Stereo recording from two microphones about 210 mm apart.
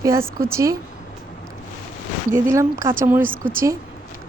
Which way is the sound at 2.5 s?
15° right (ahead or behind).